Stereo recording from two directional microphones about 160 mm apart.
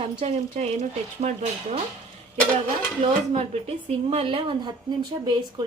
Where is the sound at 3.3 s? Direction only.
40° right (ahead or behind).